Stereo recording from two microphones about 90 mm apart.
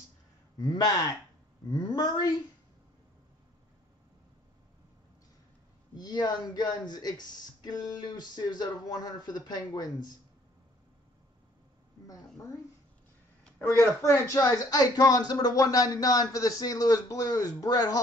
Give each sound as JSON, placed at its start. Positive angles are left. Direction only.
{"t": 0.6, "sound": "speech", "side_deg": 50}
{"t": 5.9, "sound": "speech", "side_deg": 50}
{"t": 12.1, "sound": "speech", "side_deg": 40}
{"t": 13.6, "sound": "speech", "side_deg": 30}